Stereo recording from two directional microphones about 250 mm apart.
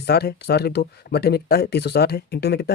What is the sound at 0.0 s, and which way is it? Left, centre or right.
Speech, left.